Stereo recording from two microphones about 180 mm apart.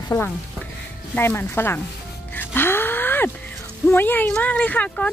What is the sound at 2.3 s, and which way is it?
Music, 10° left (ahead or behind).